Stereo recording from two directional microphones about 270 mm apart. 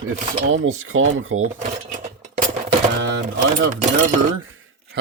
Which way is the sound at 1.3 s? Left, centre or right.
Right.